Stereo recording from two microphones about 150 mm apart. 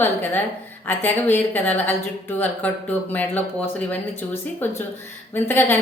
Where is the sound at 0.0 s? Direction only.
15° left (ahead or behind).